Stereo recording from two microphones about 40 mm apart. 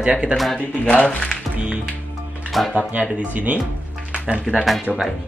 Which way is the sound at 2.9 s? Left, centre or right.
Right.